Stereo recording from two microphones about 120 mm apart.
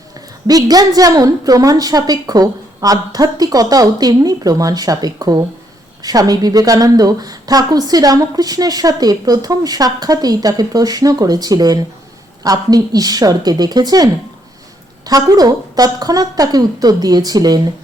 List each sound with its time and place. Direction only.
0.4 s a woman's voice: 35° right (ahead or behind)